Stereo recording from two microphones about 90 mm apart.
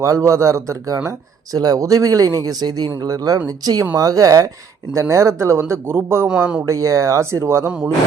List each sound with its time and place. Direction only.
0.0 s a man's voice: 35° right (ahead or behind)
1.5 s a man's voice: 45° right (ahead or behind); by 6.2 s 30° right (ahead or behind)
6.2 s speech: 10° right (ahead or behind)
6.7 s a man's voice: 35° right (ahead or behind)